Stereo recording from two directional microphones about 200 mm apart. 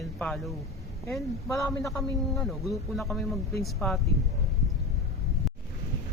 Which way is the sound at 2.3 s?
Centre (ahead or behind).